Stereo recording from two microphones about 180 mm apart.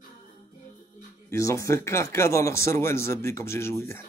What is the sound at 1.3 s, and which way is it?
Speech, 15° left (ahead or behind).